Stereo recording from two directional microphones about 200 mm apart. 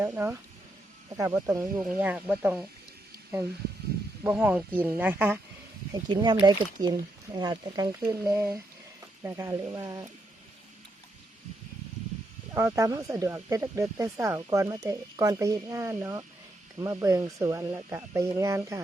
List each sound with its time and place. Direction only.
0.0 s speech: 10° right (ahead or behind)
4.2 s speech: 10° right (ahead or behind)
5.9 s speech: 20° right (ahead or behind)
12.5 s speech: 15° right (ahead or behind)